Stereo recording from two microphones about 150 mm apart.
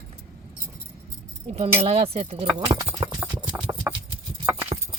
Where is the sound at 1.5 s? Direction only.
45° right (ahead or behind).